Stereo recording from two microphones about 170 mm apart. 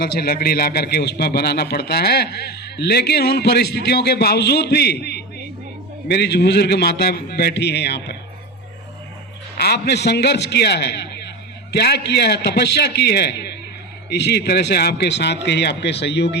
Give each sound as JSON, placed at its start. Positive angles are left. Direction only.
{"t": 0.0, "sound": "a man's voice", "side_deg": 65}
{"t": 9.6, "sound": "a man's voice", "side_deg": 70}